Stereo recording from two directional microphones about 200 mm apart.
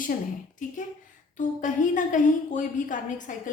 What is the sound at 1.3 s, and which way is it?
A woman's voice, 40° left (ahead or behind).